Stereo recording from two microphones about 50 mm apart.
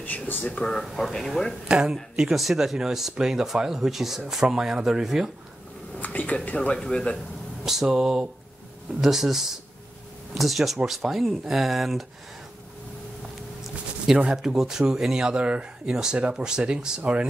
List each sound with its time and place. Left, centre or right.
0.0 s speech: left
0.9 s speech: centre
1.7 s speech: centre
2.1 s speech: centre
5.9 s speech: left
7.6 s speech: centre
14.3 s speech: centre